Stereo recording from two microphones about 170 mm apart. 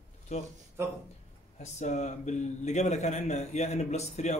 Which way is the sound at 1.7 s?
45° left (ahead or behind).